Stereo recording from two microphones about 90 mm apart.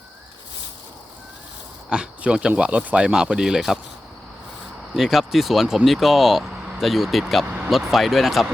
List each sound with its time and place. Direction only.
1.9 s speech: 10° right (ahead or behind)
4.9 s speech: centre (ahead or behind)
7.4 s vehicle: 15° right (ahead or behind)
7.7 s speech: 5° right (ahead or behind)